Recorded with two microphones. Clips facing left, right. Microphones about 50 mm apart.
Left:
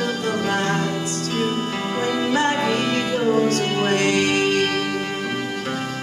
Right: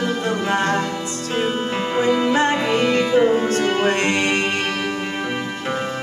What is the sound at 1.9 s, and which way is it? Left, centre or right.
Music, right.